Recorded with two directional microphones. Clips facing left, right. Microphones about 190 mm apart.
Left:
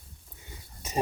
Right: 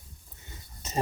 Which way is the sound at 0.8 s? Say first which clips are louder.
Left 1 dB; 15° left (ahead or behind).